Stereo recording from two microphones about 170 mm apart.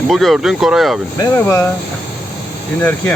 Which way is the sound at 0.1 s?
Centre (ahead or behind).